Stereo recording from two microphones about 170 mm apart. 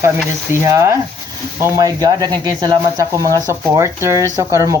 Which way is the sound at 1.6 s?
20° right (ahead or behind).